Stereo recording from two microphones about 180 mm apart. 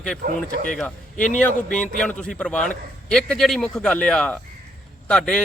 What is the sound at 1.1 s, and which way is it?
Speech, 45° left (ahead or behind).